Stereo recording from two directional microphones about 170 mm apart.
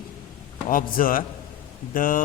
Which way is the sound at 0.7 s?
55° left (ahead or behind).